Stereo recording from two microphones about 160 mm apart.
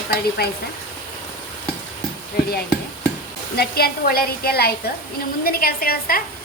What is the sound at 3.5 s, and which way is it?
A woman's voice, 75° left (ahead or behind).